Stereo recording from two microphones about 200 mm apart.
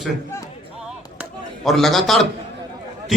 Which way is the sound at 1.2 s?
Centre (ahead or behind).